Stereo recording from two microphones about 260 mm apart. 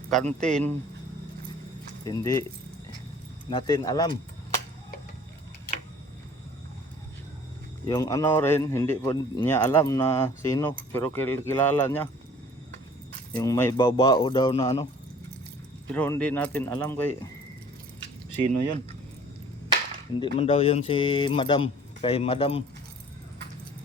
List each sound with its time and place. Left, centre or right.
0.1 s speech: centre
2.0 s speech: centre
3.5 s speech: centre
7.9 s speech: centre
13.3 s speech: centre
15.9 s speech: centre
20.1 s speech: left